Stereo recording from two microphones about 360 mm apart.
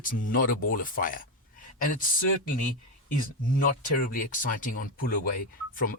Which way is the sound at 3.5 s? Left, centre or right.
Left.